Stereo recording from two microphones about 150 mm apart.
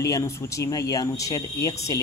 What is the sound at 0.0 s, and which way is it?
Speech, 20° left (ahead or behind).